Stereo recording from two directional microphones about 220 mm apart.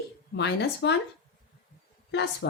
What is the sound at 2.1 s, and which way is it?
Speech, 50° left (ahead or behind).